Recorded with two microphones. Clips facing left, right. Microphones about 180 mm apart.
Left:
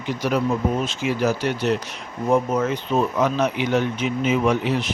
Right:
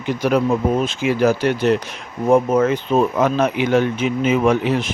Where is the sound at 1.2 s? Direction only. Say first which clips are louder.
Right 5 dB; 55° right (ahead or behind).